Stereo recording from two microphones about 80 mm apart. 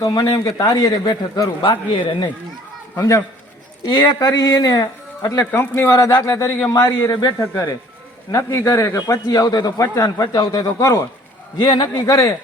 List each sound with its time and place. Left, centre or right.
0.0 s a man's voice: left
1.6 s speech: left
3.0 s a man's voice: left
5.5 s speech: left
5.9 s a man's voice: left
6.2 s a man's voice: left
10.2 s speech: left
10.8 s a man's voice: left
11.6 s a man's voice: left
11.9 s speech: left